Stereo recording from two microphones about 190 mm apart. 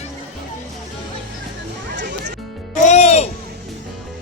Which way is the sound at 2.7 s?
40° left (ahead or behind).